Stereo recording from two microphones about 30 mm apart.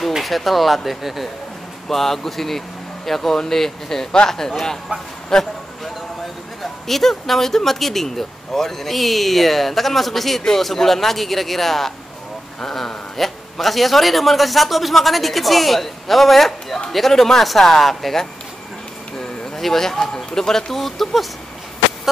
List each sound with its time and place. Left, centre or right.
0.2 s a man's voice: centre
1.9 s speech: centre
5.3 s speech: centre
6.6 s a man's voice: centre
19.5 s speech: centre